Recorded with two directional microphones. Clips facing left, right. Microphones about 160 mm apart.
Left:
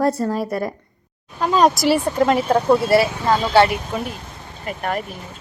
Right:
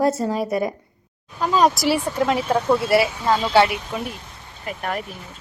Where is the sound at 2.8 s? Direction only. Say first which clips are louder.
Left 2 dB; 40° left (ahead or behind).